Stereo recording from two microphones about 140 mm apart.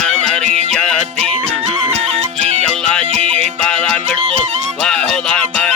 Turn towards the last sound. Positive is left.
turn(degrees=5)  # may be behind; listen again after turning